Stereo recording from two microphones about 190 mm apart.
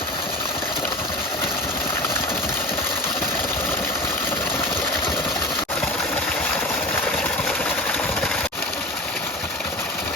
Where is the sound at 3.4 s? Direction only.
10° left (ahead or behind).